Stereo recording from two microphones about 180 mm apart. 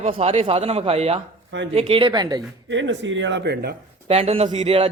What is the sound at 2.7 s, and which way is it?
Speech, 90° right.